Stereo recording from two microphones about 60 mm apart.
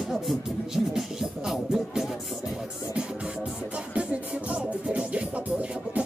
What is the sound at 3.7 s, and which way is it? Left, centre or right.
Music, centre.